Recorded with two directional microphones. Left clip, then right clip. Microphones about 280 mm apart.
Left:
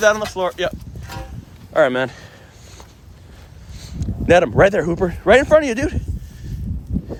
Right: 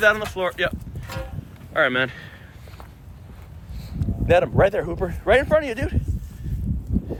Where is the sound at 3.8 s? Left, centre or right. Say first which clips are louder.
Left 1 dB; left.